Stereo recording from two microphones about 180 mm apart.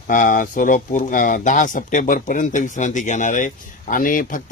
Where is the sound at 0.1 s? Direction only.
50° left (ahead or behind).